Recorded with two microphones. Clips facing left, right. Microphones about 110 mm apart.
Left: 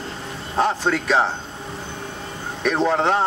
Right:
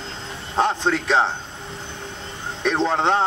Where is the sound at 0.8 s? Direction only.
20° right (ahead or behind).